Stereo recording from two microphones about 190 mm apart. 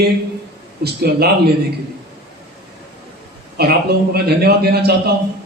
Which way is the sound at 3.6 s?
55° right (ahead or behind).